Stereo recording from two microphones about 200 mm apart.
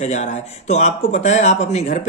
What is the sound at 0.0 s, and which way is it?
Speech, 35° left (ahead or behind).